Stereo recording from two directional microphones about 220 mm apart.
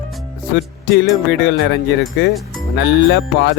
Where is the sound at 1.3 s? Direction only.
55° left (ahead or behind).